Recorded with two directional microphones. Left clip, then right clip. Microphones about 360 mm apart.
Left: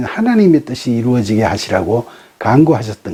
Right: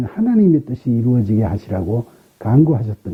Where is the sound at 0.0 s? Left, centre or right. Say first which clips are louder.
Left 4 dB; centre.